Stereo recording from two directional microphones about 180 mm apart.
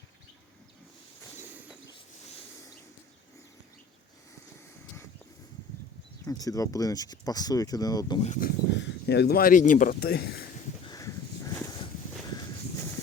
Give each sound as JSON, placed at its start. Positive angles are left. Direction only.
{"t": 6.2, "sound": "speech", "side_deg": 20}
{"t": 8.2, "sound": "speech", "side_deg": 45}
{"t": 8.7, "sound": "speech", "side_deg": 70}
{"t": 10.8, "sound": "a sound", "side_deg": 20}